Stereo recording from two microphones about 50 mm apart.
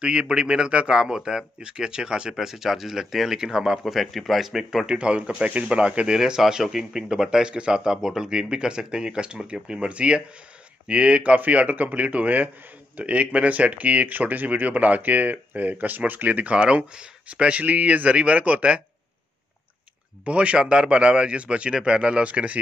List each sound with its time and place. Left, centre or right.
0.0 s speech: centre
3.8 s speech: centre; by 16.5 s right
16.5 s speech: centre
20.2 s speech: right